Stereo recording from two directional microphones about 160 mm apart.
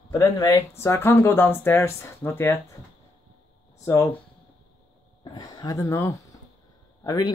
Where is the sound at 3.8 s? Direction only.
20° left (ahead or behind).